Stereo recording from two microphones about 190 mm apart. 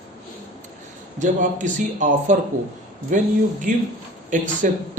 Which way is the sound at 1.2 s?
40° right (ahead or behind).